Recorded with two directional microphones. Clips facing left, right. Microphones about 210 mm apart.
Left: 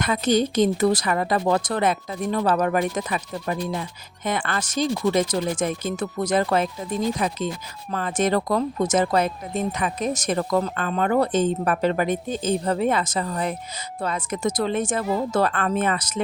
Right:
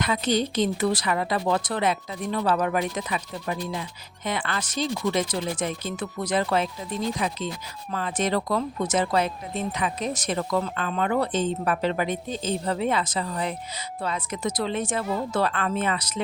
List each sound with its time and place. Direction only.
0.0 s speech: 45° left (ahead or behind)